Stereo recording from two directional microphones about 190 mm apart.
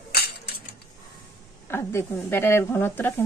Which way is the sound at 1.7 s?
15° left (ahead or behind).